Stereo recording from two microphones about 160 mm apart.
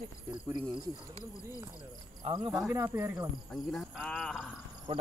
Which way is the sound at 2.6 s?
15° right (ahead or behind).